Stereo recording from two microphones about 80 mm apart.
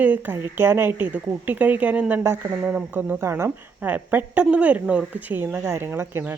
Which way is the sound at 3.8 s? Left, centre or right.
Right.